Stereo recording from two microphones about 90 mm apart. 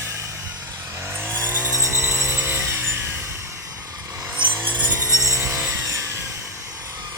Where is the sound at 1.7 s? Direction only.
30° right (ahead or behind).